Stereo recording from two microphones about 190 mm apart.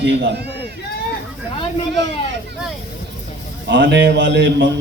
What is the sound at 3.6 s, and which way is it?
A man's voice, 70° right (ahead or behind).